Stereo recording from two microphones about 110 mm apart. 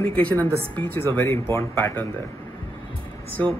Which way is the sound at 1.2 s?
25° left (ahead or behind).